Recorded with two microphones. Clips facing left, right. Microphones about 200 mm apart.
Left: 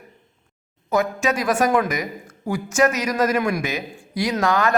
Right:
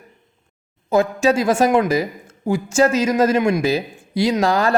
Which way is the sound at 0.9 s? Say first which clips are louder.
Right 5 dB; 30° right (ahead or behind).